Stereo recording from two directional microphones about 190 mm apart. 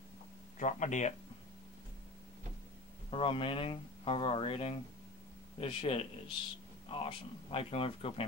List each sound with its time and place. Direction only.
0.6 s speech: 40° left (ahead or behind)
3.1 s speech: 25° left (ahead or behind)